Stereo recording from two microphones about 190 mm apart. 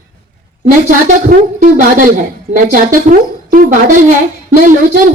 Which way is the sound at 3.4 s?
50° right (ahead or behind).